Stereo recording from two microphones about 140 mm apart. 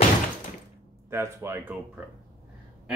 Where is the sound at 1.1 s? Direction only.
20° right (ahead or behind).